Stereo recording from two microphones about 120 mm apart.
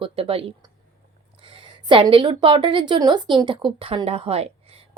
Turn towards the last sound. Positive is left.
turn(degrees=-55)  # may be behind; listen again after turning